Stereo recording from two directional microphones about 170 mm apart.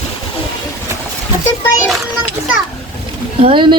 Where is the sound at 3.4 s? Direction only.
30° right (ahead or behind).